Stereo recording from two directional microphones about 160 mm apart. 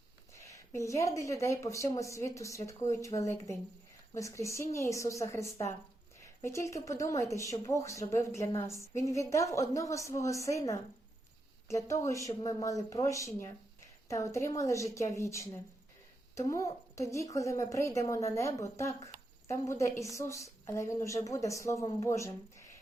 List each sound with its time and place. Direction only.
0.3 s a woman's voice: 20° left (ahead or behind)